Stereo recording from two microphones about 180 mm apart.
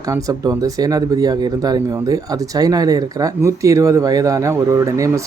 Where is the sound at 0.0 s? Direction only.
20° right (ahead or behind).